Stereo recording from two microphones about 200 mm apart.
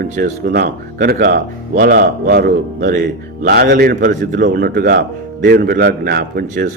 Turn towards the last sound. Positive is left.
turn(degrees=-50)  # may be behind; listen again after turning